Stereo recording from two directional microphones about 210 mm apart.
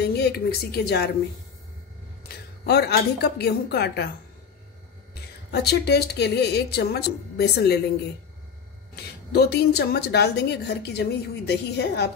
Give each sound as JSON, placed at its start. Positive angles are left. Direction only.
{"t": 0.0, "sound": "speech", "side_deg": 50}
{"t": 2.2, "sound": "a woman's voice", "side_deg": 50}
{"t": 5.5, "sound": "a woman's voice", "side_deg": 50}
{"t": 8.9, "sound": "a woman's voice", "side_deg": 50}